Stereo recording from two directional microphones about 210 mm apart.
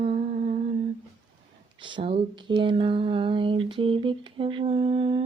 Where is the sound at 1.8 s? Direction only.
25° right (ahead or behind).